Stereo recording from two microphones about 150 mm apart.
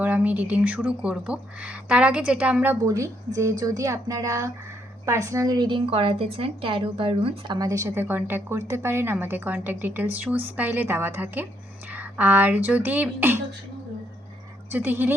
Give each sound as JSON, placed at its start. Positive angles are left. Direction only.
{"t": 0.0, "sound": "a woman's voice", "side_deg": -10}
{"t": 2.8, "sound": "a woman's voice", "side_deg": -20}
{"t": 14.7, "sound": "a woman's voice", "side_deg": -15}